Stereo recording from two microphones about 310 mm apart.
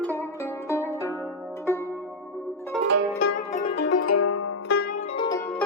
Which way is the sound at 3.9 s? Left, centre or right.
Left.